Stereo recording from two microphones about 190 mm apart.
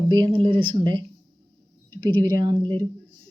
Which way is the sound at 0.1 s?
20° right (ahead or behind).